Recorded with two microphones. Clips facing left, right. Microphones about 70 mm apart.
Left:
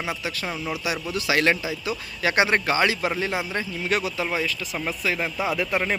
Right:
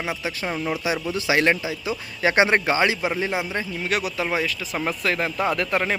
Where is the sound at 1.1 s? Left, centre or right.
Right.